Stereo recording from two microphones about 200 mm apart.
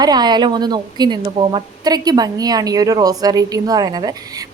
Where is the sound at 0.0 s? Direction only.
20° right (ahead or behind).